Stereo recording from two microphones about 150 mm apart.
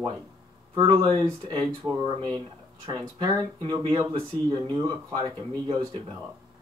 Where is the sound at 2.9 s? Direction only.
30° right (ahead or behind).